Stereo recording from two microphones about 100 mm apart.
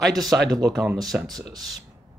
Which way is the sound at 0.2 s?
Centre (ahead or behind).